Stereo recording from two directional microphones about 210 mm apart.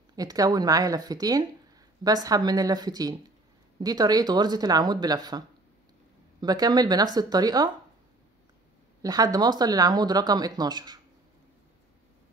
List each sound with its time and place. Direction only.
0.1 s speech: 15° right (ahead or behind)
6.4 s speech: 20° right (ahead or behind)
9.0 s speech: 15° right (ahead or behind)